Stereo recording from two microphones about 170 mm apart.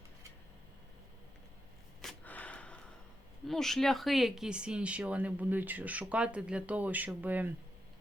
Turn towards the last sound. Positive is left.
turn(degrees=-10)  # may be behind; listen again after turning